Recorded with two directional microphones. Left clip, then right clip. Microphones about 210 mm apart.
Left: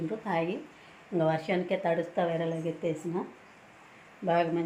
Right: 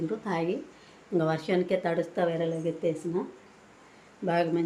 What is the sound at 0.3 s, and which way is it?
Speech, 5° right (ahead or behind).